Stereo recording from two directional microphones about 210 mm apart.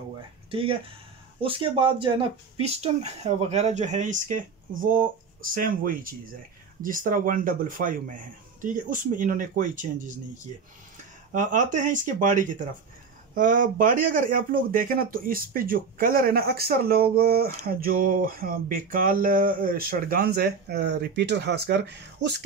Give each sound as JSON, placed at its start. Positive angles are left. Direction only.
{"t": 0.5, "sound": "speech", "side_deg": -25}